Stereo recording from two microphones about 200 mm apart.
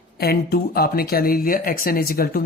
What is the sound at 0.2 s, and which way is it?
Speech, 50° left (ahead or behind).